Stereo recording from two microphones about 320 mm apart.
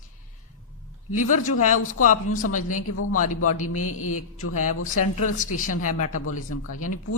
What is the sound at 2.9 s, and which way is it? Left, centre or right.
A man's voice, left.